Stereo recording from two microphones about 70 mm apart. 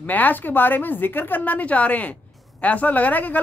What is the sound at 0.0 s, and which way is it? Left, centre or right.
Speech, left.